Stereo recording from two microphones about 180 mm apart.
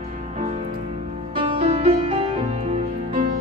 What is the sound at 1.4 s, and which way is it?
Music, 35° right (ahead or behind).